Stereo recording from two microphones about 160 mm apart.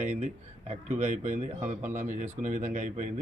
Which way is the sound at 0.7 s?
45° right (ahead or behind).